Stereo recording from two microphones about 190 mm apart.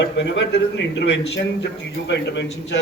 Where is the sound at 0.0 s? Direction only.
65° left (ahead or behind).